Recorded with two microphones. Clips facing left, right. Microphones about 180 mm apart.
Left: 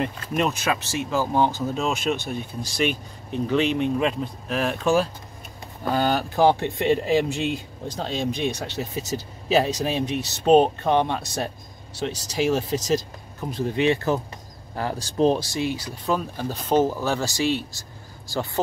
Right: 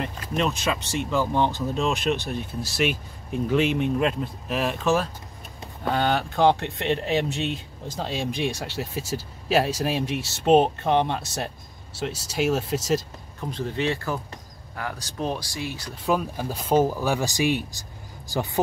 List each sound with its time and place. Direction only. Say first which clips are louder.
0.4 s speech: left 1 dB; 5° left (ahead or behind)
13.5 s speech: left 5 dB; 15° left (ahead or behind)
14.8 s speech: left 9 dB; 30° left (ahead or behind)
16.1 s speech: right 1 dB; 10° right (ahead or behind)